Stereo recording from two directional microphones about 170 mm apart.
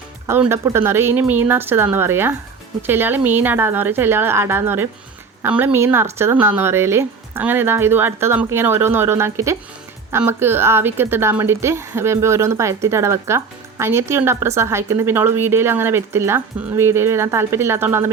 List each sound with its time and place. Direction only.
0.3 s a woman's voice: 15° right (ahead or behind)